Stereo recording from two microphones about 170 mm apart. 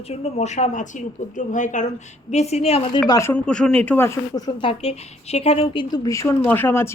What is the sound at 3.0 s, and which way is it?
Speech, 20° left (ahead or behind).